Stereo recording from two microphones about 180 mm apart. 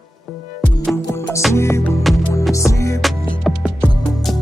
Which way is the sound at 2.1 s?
Centre (ahead or behind).